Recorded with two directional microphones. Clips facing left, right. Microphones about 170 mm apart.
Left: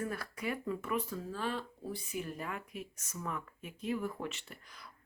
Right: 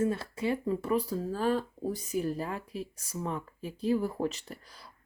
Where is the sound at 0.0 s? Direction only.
25° right (ahead or behind).